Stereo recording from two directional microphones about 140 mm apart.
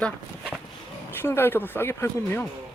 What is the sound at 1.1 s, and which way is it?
Speech, 15° left (ahead or behind).